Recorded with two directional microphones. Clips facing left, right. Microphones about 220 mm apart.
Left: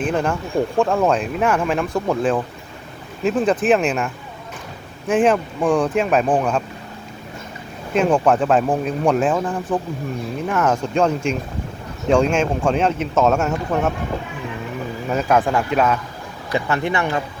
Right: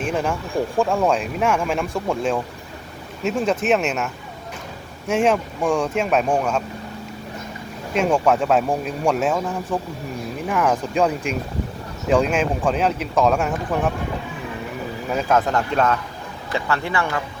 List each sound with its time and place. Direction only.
0.1 s speech: centre (ahead or behind)
7.9 s speech: centre (ahead or behind)
10.5 s speech: centre (ahead or behind)
12.0 s speech: centre (ahead or behind)
15.1 s speech: 5° left (ahead or behind)
16.5 s speech: 20° left (ahead or behind)